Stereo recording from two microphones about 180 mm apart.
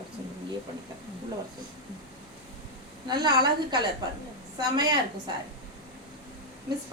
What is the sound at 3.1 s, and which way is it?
Speech, 25° right (ahead or behind).